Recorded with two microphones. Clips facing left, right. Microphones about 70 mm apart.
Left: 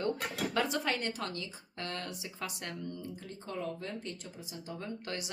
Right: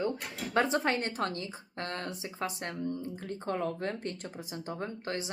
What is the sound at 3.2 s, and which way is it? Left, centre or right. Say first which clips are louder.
Speech: right 6 dB; right.